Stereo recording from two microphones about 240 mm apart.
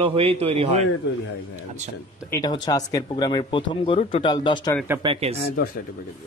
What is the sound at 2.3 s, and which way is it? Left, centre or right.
Speech, centre.